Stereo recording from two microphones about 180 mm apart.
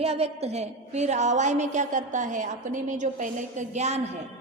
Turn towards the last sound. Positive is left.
turn(degrees=-40)  # may be behind; listen again after turning